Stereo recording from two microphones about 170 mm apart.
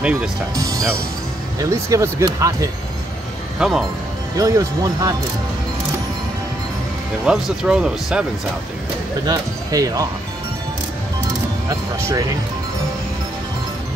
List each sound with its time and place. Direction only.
0.6 s speech: 20° right (ahead or behind)
3.5 s speech: 5° right (ahead or behind)
4.4 s speech: 20° right (ahead or behind)
7.2 s speech: 5° right (ahead or behind)
9.3 s speech: 20° right (ahead or behind)
11.7 s speech: 20° right (ahead or behind)